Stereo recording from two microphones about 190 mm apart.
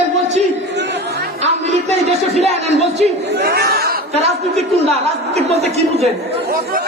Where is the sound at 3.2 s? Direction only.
60° right (ahead or behind).